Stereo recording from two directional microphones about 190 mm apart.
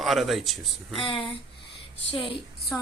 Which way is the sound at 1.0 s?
25° left (ahead or behind).